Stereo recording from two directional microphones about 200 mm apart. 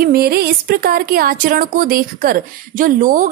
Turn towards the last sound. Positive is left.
turn(degrees=-45)  # may be behind; listen again after turning